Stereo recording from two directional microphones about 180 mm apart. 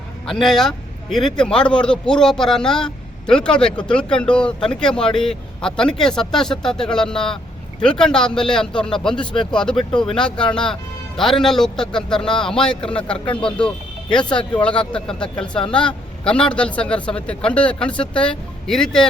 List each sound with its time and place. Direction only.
0.3 s a man's voice: centre (ahead or behind)
13.1 s speech: 30° left (ahead or behind)
13.4 s a man's voice: 5° left (ahead or behind)